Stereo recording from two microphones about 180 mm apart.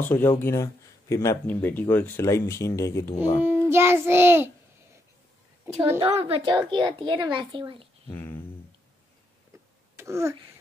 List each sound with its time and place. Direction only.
0.0 s speech: 15° left (ahead or behind)
3.4 s child singing: 15° right (ahead or behind)
5.9 s a child's voice: 30° right (ahead or behind)
8.1 s speech: 10° left (ahead or behind)
9.9 s speech: 15° right (ahead or behind)